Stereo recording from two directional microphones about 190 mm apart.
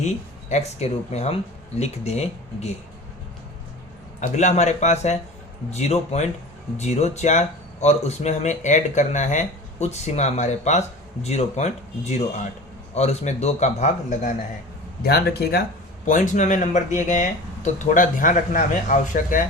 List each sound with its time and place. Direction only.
0.0 s speech: 35° left (ahead or behind)
4.2 s speech: 40° left (ahead or behind)
15.0 s speech: 55° left (ahead or behind)
16.0 s speech: 40° left (ahead or behind)